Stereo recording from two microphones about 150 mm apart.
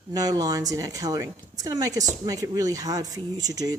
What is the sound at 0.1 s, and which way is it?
A woman's voice, 25° right (ahead or behind).